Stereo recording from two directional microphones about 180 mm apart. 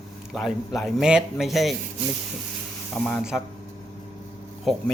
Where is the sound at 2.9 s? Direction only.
Centre (ahead or behind).